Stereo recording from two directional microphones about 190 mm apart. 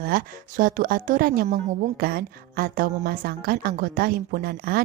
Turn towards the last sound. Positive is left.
turn(degrees=-50)  # may be behind; listen again after turning